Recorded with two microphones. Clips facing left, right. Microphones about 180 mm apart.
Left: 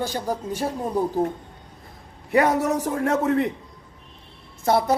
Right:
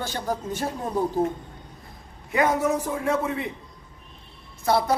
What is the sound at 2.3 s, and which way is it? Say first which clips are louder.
Speech: left 3 dB; 35° left (ahead or behind).